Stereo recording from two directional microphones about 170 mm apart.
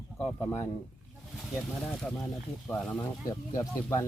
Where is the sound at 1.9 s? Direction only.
5° left (ahead or behind).